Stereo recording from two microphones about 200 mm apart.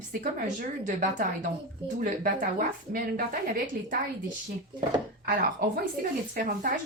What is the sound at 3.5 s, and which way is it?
Speech, 40° right (ahead or behind).